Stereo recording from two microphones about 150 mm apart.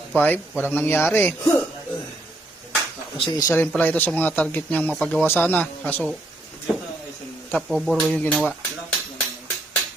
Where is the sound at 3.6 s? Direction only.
10° left (ahead or behind).